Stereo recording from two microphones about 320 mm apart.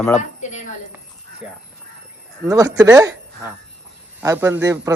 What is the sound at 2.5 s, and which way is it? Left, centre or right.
A man's voice, centre.